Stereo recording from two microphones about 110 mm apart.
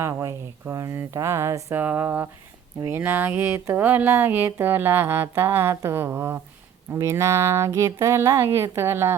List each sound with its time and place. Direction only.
0.0 s speech: 25° right (ahead or behind)